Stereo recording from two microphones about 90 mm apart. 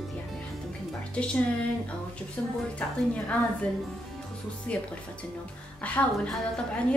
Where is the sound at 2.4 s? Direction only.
15° left (ahead or behind).